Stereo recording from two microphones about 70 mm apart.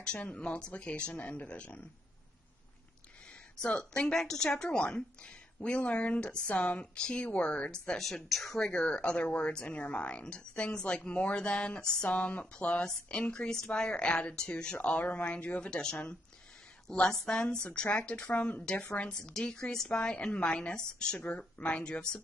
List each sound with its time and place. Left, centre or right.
0.0 s a woman's voice: centre
3.6 s a woman's voice: centre